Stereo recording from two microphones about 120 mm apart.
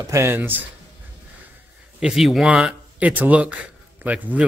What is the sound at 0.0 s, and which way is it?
Speech, 20° right (ahead or behind).